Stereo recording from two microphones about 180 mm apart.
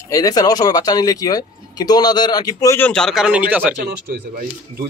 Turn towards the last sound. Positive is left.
turn(degrees=-55)  # may be behind; listen again after turning